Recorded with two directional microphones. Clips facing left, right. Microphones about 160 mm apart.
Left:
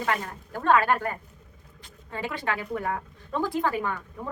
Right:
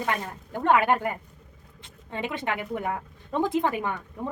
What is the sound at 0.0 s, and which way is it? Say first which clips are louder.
A woman's voice: even; 20° right (ahead or behind).